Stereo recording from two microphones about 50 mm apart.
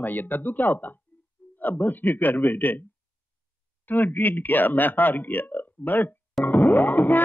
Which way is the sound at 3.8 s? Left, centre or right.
Left.